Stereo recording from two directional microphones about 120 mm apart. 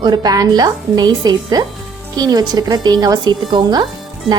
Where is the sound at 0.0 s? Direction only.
35° right (ahead or behind).